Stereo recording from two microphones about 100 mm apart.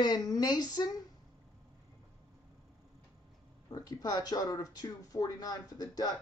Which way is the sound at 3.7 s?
40° left (ahead or behind).